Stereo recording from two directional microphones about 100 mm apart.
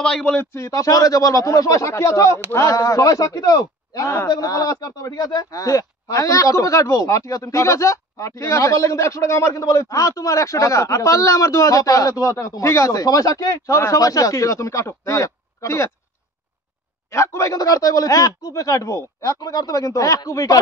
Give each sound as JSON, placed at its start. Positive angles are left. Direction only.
{"t": 0.0, "sound": "speech", "side_deg": 10}
{"t": 0.4, "sound": "speech", "side_deg": 30}
{"t": 17.1, "sound": "speech", "side_deg": 30}